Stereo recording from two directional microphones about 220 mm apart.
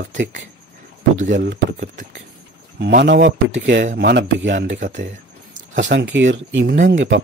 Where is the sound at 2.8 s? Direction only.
50° right (ahead or behind).